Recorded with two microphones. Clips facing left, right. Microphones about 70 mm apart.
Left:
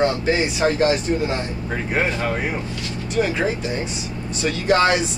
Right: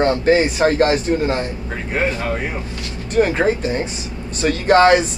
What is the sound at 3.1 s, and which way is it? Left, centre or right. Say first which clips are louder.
Speech: right 5 dB; right.